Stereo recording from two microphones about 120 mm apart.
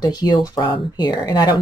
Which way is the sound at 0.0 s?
35° left (ahead or behind).